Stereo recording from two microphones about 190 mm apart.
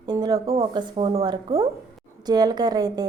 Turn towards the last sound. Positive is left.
turn(degrees=-20)  # may be behind; listen again after turning